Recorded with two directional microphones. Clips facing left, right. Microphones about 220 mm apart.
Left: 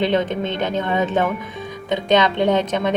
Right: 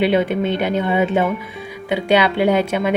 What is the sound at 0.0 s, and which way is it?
A woman's voice, 10° right (ahead or behind).